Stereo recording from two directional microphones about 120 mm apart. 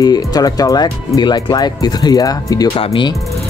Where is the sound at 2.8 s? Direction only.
50° left (ahead or behind).